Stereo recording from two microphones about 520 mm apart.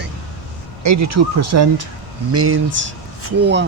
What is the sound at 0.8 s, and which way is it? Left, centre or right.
Speech, right.